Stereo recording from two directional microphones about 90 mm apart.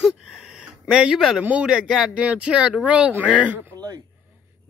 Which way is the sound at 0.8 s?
10° right (ahead or behind).